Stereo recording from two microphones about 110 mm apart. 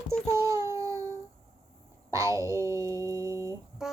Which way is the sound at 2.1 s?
30° right (ahead or behind).